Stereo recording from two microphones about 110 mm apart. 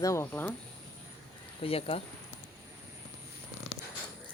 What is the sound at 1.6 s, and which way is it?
Speech, 60° left (ahead or behind).